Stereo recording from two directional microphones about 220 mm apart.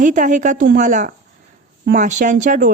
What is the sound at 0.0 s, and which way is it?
A woman's voice, 35° right (ahead or behind).